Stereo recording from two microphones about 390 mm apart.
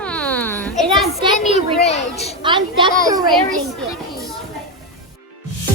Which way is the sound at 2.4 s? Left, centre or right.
Centre.